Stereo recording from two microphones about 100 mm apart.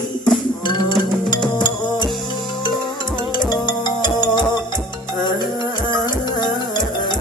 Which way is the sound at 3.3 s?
50° left (ahead or behind).